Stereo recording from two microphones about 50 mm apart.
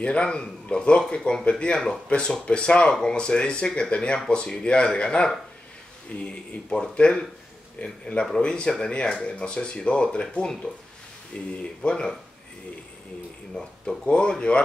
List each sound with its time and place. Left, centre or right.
0.0 s a man's voice: left
11.3 s a man's voice: left
13.6 s a man's voice: centre